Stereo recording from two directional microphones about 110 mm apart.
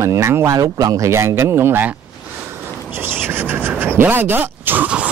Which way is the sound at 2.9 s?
20° right (ahead or behind).